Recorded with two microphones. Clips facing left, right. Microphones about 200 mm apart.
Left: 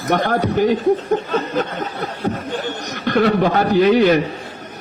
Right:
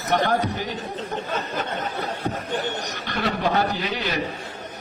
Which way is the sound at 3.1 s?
50° left (ahead or behind).